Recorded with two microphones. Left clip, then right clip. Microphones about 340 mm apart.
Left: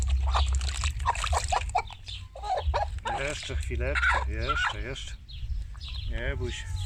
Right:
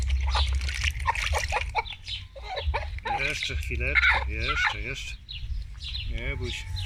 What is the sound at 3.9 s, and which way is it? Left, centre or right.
Fowl, centre.